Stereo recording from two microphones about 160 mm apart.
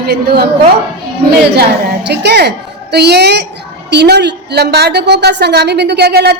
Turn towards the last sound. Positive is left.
turn(degrees=-90)